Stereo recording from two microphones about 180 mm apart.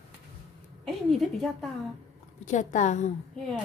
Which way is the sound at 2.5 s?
40° left (ahead or behind).